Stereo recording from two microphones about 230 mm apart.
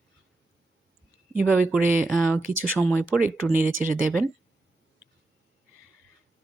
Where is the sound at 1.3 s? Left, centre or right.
Centre.